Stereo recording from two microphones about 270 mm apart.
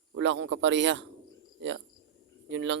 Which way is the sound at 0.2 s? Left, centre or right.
Right.